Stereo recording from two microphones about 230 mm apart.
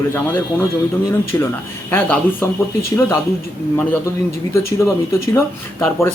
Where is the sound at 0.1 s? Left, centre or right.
Centre.